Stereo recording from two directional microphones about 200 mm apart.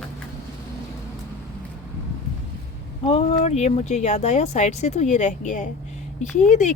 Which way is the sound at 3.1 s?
30° left (ahead or behind).